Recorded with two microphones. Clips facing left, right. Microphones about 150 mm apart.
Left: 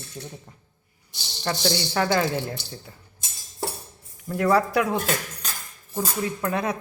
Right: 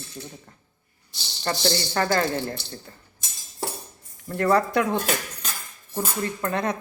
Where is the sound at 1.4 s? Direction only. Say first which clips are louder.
Even; 5° left (ahead or behind).